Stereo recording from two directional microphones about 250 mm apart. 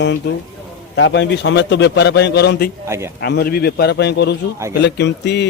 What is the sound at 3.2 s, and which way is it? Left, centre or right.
A man's voice, left.